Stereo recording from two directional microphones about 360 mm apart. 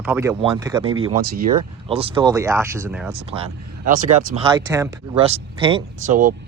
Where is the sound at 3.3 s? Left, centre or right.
Centre.